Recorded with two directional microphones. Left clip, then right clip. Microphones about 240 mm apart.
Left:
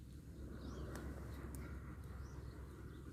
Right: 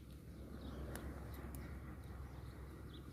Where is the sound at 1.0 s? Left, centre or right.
Left.